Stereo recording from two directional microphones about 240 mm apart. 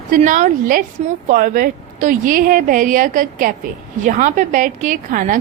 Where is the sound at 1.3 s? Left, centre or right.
Right.